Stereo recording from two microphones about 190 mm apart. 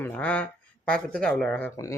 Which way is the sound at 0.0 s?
10° left (ahead or behind).